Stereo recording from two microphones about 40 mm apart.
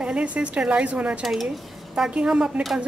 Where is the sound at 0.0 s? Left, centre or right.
Right.